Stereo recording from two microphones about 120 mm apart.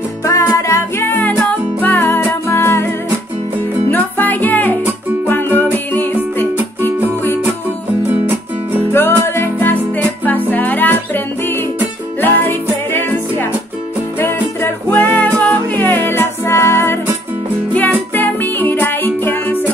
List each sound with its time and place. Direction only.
0.2 s music: 25° left (ahead or behind)
3.9 s music: 15° left (ahead or behind)
8.1 s music: 15° right (ahead or behind)
8.9 s music: 20° left (ahead or behind)
14.2 s music: 15° left (ahead or behind)
18.1 s music: 15° left (ahead or behind)